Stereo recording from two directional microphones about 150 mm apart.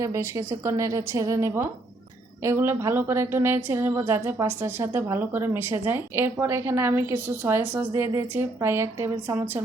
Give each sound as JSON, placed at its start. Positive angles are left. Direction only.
{"t": 0.0, "sound": "a woman's voice", "side_deg": -20}